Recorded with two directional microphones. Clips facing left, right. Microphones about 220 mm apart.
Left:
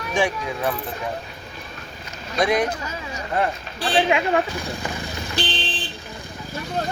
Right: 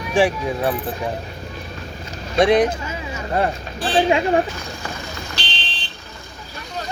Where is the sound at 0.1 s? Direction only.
30° right (ahead or behind).